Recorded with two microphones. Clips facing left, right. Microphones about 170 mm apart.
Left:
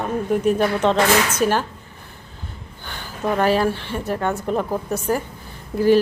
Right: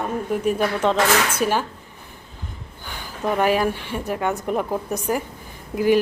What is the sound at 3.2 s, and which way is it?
A woman's voice, 5° right (ahead or behind).